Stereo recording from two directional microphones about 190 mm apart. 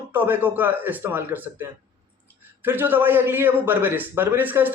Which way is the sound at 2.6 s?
10° right (ahead or behind).